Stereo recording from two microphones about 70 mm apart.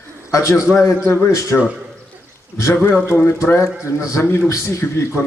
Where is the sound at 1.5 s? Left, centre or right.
Left.